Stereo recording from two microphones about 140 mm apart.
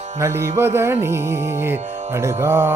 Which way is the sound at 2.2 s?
20° right (ahead or behind).